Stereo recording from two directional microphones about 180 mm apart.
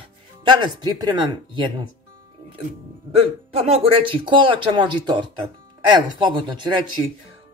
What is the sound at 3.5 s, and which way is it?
Speech, 30° right (ahead or behind).